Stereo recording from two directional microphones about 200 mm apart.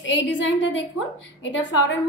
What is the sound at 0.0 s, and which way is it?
A woman's voice, 65° left (ahead or behind).